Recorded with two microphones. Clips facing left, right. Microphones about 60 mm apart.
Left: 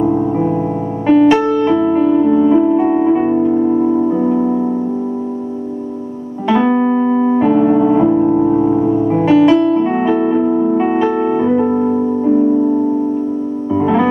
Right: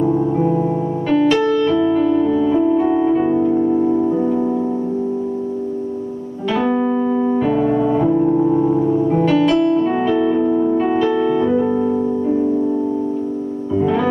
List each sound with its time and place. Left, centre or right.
1.0 s music: left
6.5 s keyboard: left
9.1 s music: left